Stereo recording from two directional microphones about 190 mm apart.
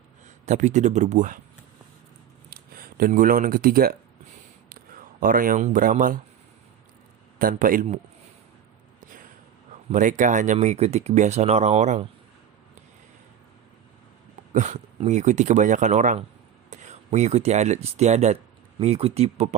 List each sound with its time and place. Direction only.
0.4 s speech: 40° right (ahead or behind)
2.5 s speech: 50° right (ahead or behind)
7.3 s a man's voice: 45° right (ahead or behind)
9.9 s speech: 40° right (ahead or behind)
14.5 s speech: 40° right (ahead or behind)